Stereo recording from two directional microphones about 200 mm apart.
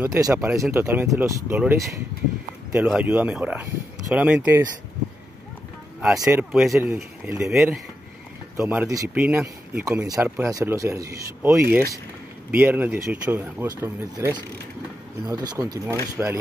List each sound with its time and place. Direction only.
0.0 s speech: 15° right (ahead or behind)
2.9 s speech: 10° right (ahead or behind)
6.1 s speech: 15° right (ahead or behind)
6.5 s speech: centre (ahead or behind); by 16.0 s 20° right (ahead or behind)
16.2 s speech: 5° right (ahead or behind)